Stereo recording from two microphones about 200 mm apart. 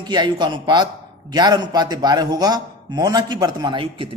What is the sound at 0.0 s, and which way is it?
A woman's voice, 20° right (ahead or behind).